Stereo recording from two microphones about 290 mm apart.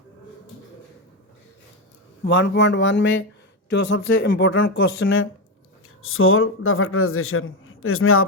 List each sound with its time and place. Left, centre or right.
2.2 s a man's voice: left